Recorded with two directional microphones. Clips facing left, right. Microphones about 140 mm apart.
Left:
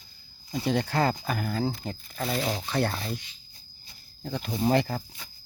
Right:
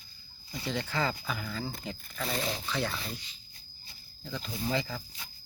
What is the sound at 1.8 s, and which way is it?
Speech, 40° left (ahead or behind).